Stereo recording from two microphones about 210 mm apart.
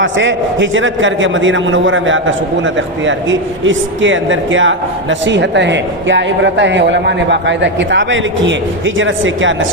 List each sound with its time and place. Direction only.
0.0 s a man's voice: 60° right (ahead or behind)